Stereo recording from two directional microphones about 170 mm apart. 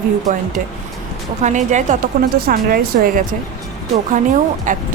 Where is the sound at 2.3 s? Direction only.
65° right (ahead or behind).